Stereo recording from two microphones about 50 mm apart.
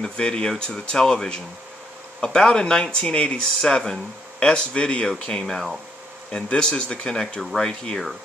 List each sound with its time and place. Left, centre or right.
0.0 s speech: centre